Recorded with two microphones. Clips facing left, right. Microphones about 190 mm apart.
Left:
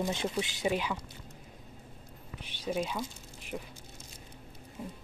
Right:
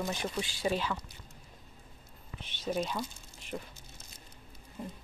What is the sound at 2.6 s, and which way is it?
Speech, 5° left (ahead or behind).